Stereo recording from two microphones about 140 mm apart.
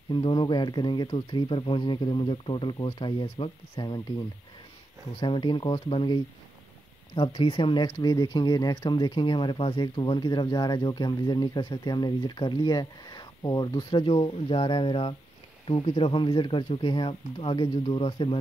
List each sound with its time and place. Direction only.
0.1 s speech: 35° left (ahead or behind)
5.2 s speech: 35° left (ahead or behind)